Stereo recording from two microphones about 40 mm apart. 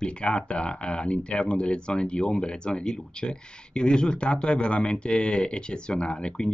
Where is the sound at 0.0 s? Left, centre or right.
Left.